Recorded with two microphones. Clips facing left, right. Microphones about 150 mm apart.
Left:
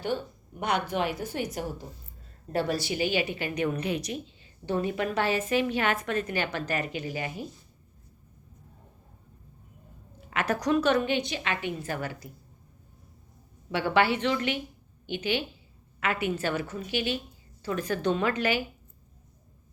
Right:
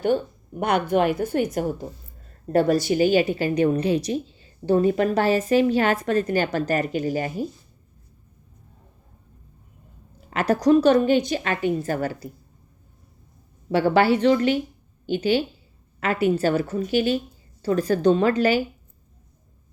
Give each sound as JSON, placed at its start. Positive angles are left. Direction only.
{"t": 0.6, "sound": "a woman's voice", "side_deg": -55}
{"t": 10.2, "sound": "a woman's voice", "side_deg": -35}
{"t": 13.7, "sound": "a woman's voice", "side_deg": -40}